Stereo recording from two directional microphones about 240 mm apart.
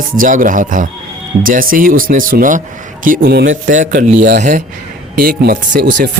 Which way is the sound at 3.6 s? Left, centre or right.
Right.